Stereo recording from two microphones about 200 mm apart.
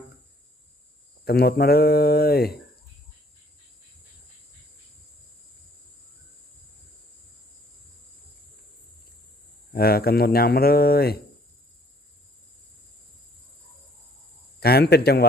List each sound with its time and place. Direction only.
1.2 s speech: 50° left (ahead or behind)
9.7 s speech: 50° left (ahead or behind)
14.6 s speech: 50° left (ahead or behind)